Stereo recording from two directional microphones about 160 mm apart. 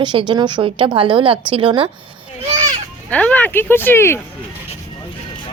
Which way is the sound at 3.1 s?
10° left (ahead or behind).